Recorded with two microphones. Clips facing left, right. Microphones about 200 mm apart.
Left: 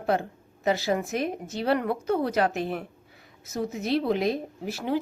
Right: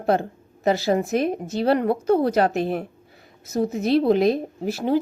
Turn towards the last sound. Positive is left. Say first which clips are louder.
# right 6 dB
turn(degrees=-35)  # may be behind; listen again after turning